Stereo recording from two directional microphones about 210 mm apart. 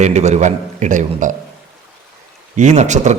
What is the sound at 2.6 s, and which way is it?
Speech, 35° right (ahead or behind).